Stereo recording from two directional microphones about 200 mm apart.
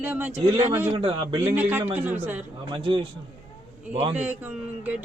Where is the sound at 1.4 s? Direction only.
10° right (ahead or behind).